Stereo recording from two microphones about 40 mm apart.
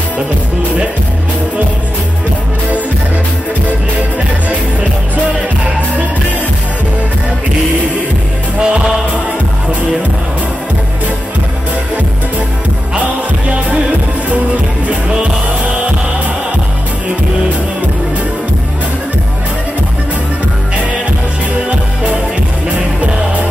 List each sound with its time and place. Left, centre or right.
8.5 s music: right
12.9 s music: right
14.9 s music: right
21.6 s music: right